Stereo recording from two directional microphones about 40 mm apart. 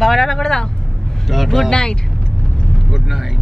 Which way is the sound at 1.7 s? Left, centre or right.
Centre.